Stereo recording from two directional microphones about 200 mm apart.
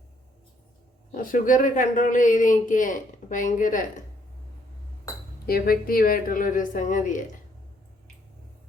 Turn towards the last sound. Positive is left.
turn(degrees=40)  # may be behind; listen again after turning